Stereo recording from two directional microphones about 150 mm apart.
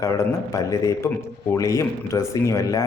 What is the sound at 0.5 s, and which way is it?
A man's voice, 20° left (ahead or behind).